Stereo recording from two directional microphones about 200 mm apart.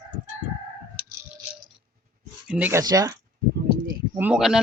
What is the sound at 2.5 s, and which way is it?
Speech, 10° right (ahead or behind).